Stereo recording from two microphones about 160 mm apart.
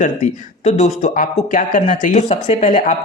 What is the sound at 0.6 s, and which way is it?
Speech, 45° left (ahead or behind).